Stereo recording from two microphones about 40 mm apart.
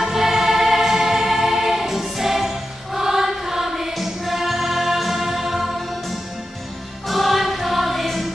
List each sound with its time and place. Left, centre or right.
0.0 s music: centre